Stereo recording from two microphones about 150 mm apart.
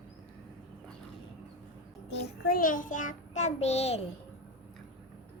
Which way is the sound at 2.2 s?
75° left (ahead or behind).